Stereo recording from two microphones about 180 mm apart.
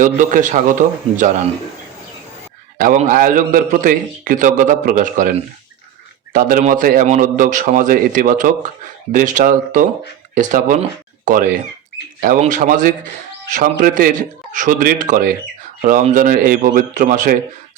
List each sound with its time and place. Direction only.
0.0 s a man's voice: 45° right (ahead or behind)
2.8 s a man's voice: 45° right (ahead or behind)
6.6 s a man's voice: 45° right (ahead or behind)